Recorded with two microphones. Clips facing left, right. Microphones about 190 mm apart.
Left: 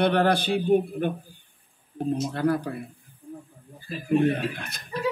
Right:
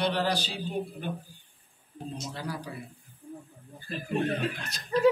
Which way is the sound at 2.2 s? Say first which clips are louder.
Left 12 dB; 55° left (ahead or behind).